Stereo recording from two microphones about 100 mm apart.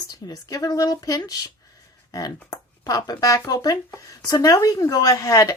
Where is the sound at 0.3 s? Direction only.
40° left (ahead or behind).